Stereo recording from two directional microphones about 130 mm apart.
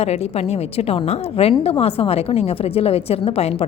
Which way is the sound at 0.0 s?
55° left (ahead or behind).